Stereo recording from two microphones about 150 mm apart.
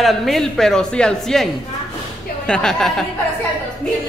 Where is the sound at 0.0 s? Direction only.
Centre (ahead or behind).